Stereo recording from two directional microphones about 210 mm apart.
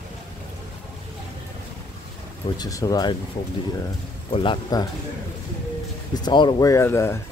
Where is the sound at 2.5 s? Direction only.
15° left (ahead or behind).